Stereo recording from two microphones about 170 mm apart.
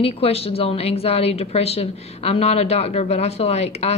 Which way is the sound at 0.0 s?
35° left (ahead or behind).